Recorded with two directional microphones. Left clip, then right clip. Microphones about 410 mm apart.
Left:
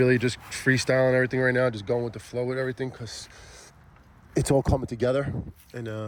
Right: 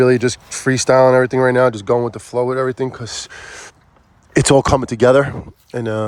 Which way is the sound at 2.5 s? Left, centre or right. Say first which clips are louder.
Right 9 dB; right.